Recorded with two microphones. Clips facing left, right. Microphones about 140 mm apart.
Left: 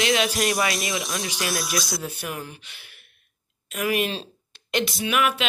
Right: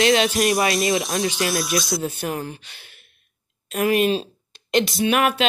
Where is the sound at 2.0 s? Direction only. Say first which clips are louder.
Right 6 dB; 35° right (ahead or behind).